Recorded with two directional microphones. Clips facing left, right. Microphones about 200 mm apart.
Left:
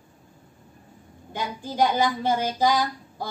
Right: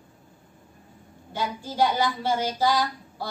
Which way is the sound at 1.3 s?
15° left (ahead or behind).